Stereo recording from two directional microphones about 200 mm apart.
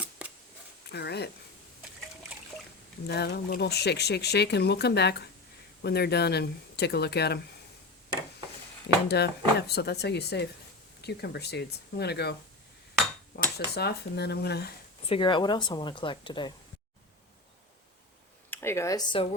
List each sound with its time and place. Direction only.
0.9 s speech: 55° left (ahead or behind)
3.1 s speech: 55° left (ahead or behind)
9.0 s speech: 55° left (ahead or behind)
13.3 s dishes: 40° left (ahead or behind)
13.7 s speech: 55° left (ahead or behind)
15.1 s speech: 25° left (ahead or behind)
18.5 s speech: 10° left (ahead or behind)